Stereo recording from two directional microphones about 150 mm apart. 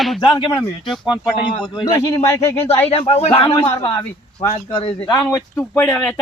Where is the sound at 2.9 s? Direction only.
40° left (ahead or behind).